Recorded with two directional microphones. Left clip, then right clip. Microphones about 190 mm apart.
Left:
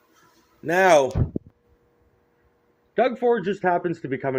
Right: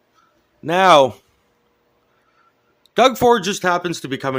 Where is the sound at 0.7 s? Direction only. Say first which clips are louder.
Right 5 dB; 40° right (ahead or behind).